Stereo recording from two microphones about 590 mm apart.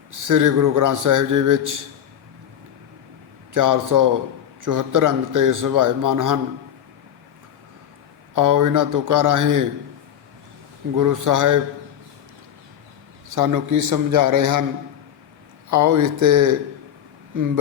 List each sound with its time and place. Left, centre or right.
0.1 s a man's voice: right
3.5 s a man's voice: right
8.4 s a man's voice: right
10.9 s a man's voice: right
13.3 s a man's voice: right
15.7 s a man's voice: right